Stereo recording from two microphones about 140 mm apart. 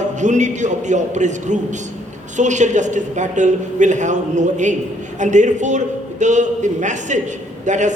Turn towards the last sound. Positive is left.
turn(degrees=-60)  # may be behind; listen again after turning